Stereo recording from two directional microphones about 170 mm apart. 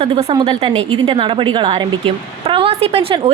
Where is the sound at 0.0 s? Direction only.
35° right (ahead or behind).